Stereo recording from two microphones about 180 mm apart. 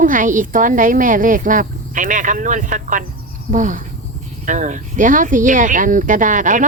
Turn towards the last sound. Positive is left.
turn(degrees=-45)  # may be behind; listen again after turning